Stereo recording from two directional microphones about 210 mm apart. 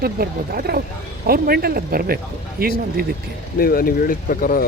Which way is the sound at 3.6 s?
45° left (ahead or behind).